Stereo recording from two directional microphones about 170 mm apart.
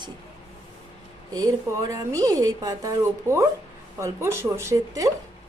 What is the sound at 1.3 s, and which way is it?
A woman's voice, 20° right (ahead or behind).